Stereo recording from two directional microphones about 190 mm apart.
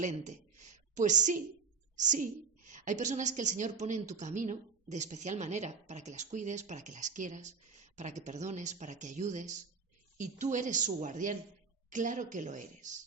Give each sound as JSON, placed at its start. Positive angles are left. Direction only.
{"t": 0.0, "sound": "a woman's voice", "side_deg": -40}